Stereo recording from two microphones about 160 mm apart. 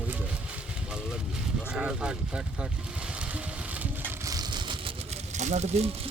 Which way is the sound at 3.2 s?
10° right (ahead or behind).